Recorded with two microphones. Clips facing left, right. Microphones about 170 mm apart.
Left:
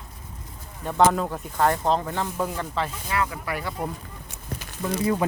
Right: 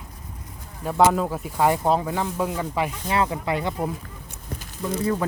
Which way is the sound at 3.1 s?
25° right (ahead or behind).